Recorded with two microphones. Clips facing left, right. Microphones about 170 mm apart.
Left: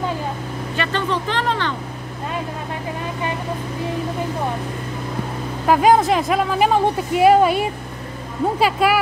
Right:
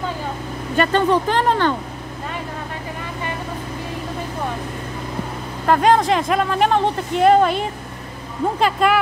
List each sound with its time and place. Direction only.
0.7 s speech: 45° right (ahead or behind)
5.7 s speech: 5° left (ahead or behind)